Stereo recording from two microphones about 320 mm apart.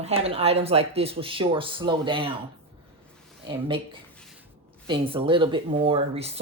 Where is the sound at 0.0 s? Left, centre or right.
Centre.